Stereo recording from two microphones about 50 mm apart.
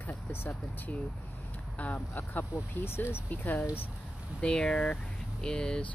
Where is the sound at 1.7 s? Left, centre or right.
Left.